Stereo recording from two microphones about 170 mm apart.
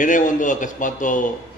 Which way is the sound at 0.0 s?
50° left (ahead or behind).